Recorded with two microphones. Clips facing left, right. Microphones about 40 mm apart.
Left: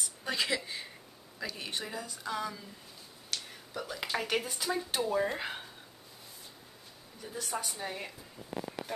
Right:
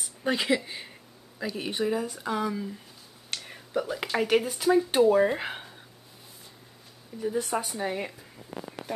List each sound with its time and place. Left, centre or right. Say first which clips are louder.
0.2 s speech: right 7 dB; right
0.7 s a sound: right 2 dB; right
1.4 s speech: right 9 dB; centre
3.3 s a sound: right 3 dB; right
3.8 s speech: right 4 dB; centre
7.2 s speech: right 10 dB; right